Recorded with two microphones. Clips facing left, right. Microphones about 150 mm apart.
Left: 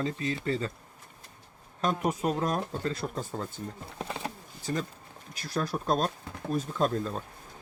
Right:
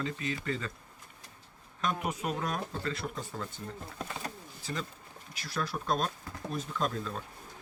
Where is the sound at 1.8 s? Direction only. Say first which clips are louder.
Left 5 dB; 40° left (ahead or behind).